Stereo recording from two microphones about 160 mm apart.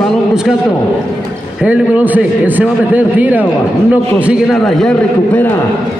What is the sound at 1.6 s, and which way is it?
A man's voice, 10° right (ahead or behind).